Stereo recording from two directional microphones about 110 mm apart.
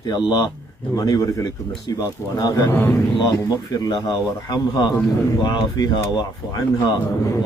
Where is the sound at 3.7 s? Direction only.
35° left (ahead or behind).